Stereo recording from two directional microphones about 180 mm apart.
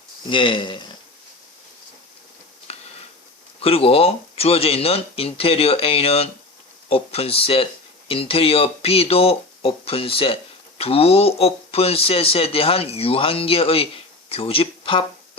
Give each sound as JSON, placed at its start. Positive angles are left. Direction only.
{"t": 0.3, "sound": "speech", "side_deg": 30}
{"t": 2.7, "sound": "a sound", "side_deg": 35}
{"t": 3.6, "sound": "speech", "side_deg": 30}